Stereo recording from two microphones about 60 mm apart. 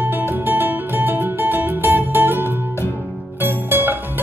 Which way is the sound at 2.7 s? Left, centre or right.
Left.